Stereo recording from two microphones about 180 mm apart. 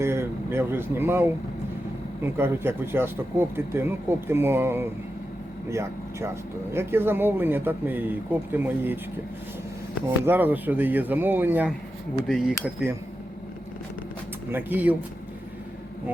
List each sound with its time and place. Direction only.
0.0 s speech: 15° right (ahead or behind)
10.2 s speech: 10° right (ahead or behind)
14.5 s speech: 10° right (ahead or behind)